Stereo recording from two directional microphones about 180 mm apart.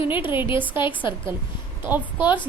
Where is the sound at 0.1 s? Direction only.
10° right (ahead or behind).